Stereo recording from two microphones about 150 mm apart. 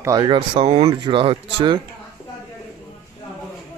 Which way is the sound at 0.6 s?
45° right (ahead or behind).